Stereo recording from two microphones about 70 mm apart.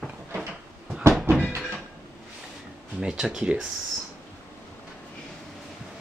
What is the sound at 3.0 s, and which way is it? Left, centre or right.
Speech, centre.